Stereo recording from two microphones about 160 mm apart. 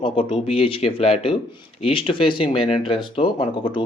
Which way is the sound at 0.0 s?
35° left (ahead or behind).